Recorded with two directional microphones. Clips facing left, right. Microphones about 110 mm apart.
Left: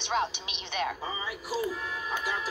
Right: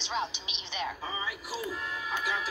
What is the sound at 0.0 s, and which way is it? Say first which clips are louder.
Speech: left 4 dB; 55° left (ahead or behind).